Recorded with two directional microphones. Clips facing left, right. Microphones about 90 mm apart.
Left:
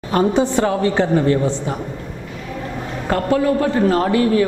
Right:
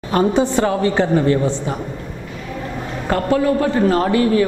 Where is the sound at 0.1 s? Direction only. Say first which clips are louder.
Even; 10° right (ahead or behind).